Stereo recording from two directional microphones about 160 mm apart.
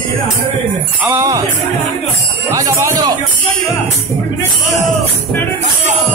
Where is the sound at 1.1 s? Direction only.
20° right (ahead or behind).